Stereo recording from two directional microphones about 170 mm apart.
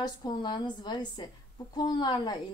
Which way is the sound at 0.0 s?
25° left (ahead or behind).